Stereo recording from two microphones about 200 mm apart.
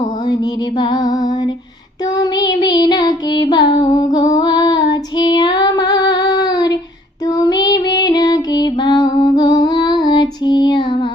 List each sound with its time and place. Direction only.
0.8 s music: 20° left (ahead or behind)
2.1 s child singing: 20° left (ahead or behind)